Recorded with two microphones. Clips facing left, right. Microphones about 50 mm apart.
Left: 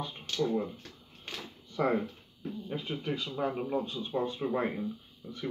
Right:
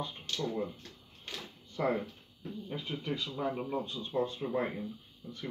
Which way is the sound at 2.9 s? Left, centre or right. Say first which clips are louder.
Left 1 dB; left.